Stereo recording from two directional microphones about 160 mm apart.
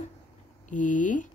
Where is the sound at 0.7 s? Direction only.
55° left (ahead or behind).